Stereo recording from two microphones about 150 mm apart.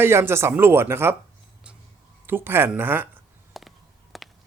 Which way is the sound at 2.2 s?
15° right (ahead or behind).